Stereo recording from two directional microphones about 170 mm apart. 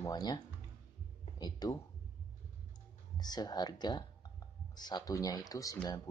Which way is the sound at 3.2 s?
25° left (ahead or behind).